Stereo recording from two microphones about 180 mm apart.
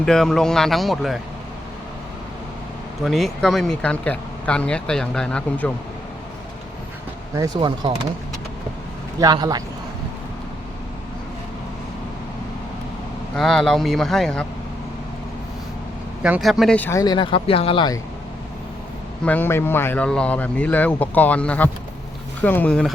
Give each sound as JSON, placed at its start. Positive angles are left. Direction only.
{"t": 0.0, "sound": "speech", "side_deg": 5}
{"t": 3.0, "sound": "speech", "side_deg": 0}
{"t": 7.3, "sound": "speech", "side_deg": -20}
{"t": 9.2, "sound": "speech", "side_deg": -20}
{"t": 13.3, "sound": "speech", "side_deg": 0}
{"t": 16.2, "sound": "speech", "side_deg": -5}
{"t": 19.2, "sound": "speech", "side_deg": 10}